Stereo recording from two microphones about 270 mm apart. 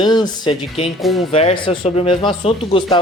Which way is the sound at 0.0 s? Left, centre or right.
Centre.